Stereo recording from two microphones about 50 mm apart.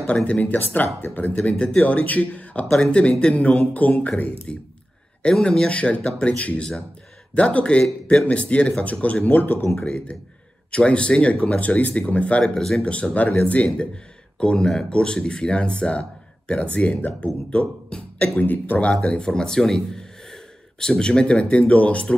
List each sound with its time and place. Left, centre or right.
0.0 s speech: left
4.5 s speech: centre; by 9.7 s left
9.8 s speech: centre
12.5 s speech: centre
12.8 s speech: left
14.4 s speech: centre
18.4 s speech: left
19.1 s speech: centre